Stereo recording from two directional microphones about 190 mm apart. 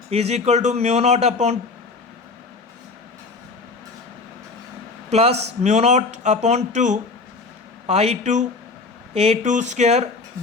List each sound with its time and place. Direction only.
0.1 s speech: 35° right (ahead or behind)
5.1 s speech: 35° right (ahead or behind)